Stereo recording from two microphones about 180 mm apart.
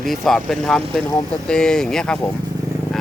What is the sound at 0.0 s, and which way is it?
Speech, centre (ahead or behind).